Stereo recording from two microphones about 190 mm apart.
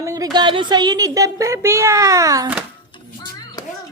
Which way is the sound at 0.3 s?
25° right (ahead or behind).